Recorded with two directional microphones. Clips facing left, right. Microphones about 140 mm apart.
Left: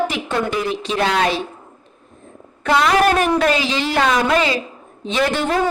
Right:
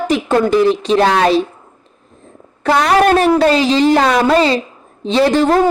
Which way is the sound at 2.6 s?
40° right (ahead or behind).